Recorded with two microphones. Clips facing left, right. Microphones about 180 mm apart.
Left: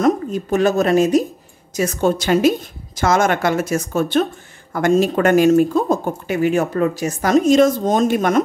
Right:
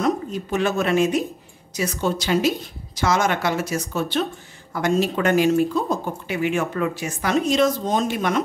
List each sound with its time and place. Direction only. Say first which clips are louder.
0.0 s speech: left 6 dB; 45° left (ahead or behind)